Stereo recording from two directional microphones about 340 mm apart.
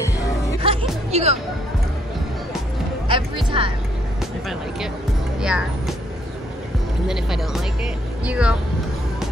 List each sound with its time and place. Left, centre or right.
0.6 s music: centre
3.1 s music: centre
5.4 s speech: centre
7.1 s speech: centre